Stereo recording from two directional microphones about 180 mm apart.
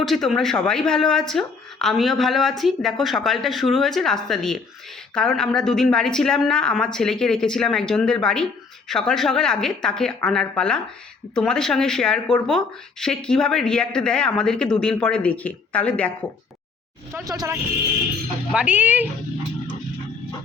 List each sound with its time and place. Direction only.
0.0 s speech: centre (ahead or behind)
17.2 s speech: 20° right (ahead or behind)